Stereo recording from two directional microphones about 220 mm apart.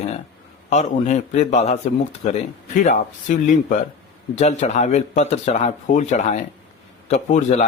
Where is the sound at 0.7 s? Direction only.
30° left (ahead or behind).